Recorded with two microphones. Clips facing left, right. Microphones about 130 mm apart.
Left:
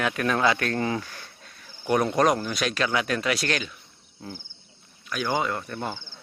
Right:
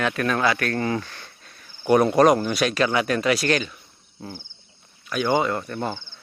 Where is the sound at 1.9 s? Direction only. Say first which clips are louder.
Right 5 dB; 5° right (ahead or behind).